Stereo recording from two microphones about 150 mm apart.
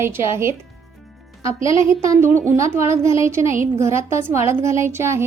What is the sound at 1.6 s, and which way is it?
Speech, 35° left (ahead or behind).